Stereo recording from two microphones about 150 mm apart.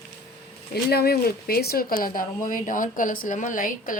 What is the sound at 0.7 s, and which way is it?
Speech, 90° left.